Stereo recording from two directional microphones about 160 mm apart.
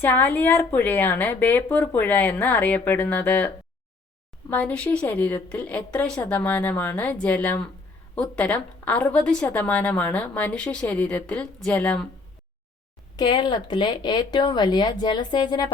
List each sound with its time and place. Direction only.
0.0 s a woman's voice: 10° left (ahead or behind)
13.1 s speech: 30° left (ahead or behind)